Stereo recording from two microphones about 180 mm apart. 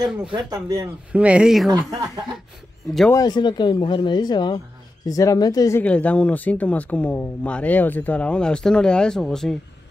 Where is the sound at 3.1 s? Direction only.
20° left (ahead or behind); by 9.6 s 5° left (ahead or behind).